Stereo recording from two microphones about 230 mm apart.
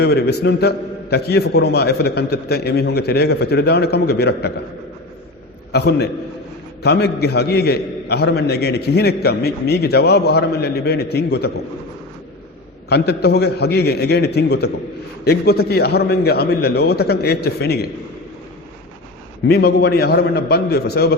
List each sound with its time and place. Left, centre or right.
0.0 s a man's voice: left
5.7 s a man's voice: left
12.9 s a man's voice: left
19.5 s a man's voice: left